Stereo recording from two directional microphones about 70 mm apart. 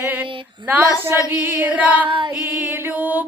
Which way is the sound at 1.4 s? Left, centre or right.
Right.